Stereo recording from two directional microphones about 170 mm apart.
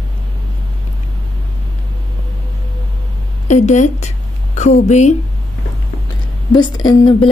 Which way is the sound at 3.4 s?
45° left (ahead or behind).